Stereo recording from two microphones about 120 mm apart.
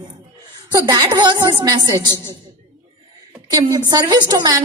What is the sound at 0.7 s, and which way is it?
A woman's voice, 30° right (ahead or behind).